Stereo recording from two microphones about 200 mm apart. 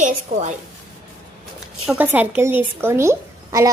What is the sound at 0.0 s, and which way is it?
Speech, 35° right (ahead or behind).